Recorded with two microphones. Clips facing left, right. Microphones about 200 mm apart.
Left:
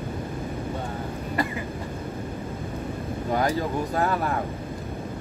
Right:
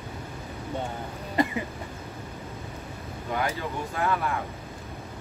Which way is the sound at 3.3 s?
35° left (ahead or behind).